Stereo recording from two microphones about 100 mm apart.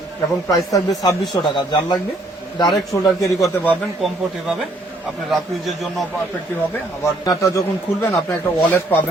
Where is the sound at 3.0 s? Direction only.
35° left (ahead or behind).